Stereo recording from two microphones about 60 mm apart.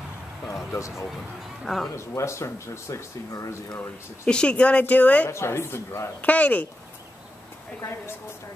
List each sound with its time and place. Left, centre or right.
0.7 s speech: left
1.6 s speech: centre
2.0 s speech: left
3.7 s speech: left
4.3 s speech: centre
5.3 s speech: left
6.2 s speech: left